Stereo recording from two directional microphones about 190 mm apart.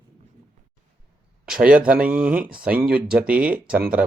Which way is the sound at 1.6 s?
5° right (ahead or behind).